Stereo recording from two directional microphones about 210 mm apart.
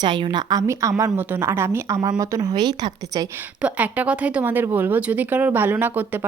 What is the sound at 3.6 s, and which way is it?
Speech, 5° right (ahead or behind).